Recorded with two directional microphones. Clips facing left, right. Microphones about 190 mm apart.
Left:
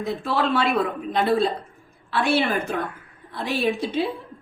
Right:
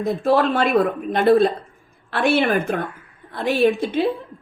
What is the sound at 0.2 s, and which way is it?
A woman's voice, 50° right (ahead or behind).